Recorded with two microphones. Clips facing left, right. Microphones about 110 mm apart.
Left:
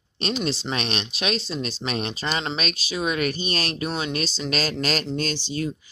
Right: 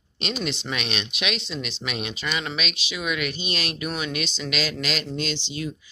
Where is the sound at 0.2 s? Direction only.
30° left (ahead or behind).